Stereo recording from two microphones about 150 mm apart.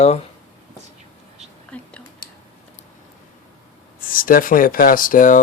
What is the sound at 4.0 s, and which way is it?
Speech, 70° left (ahead or behind).